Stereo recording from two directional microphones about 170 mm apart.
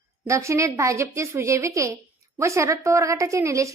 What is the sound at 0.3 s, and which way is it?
A woman's voice, 15° right (ahead or behind).